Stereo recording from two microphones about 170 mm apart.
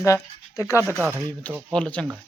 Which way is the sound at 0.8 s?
15° right (ahead or behind).